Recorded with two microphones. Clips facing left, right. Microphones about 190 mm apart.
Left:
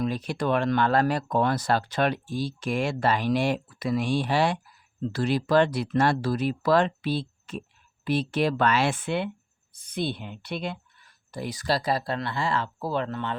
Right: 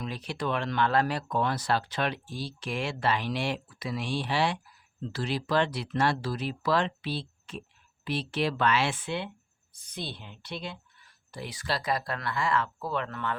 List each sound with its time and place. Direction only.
0.0 s speech: 45° left (ahead or behind)
11.3 s speech: 45° left (ahead or behind); by 13.3 s 30° left (ahead or behind)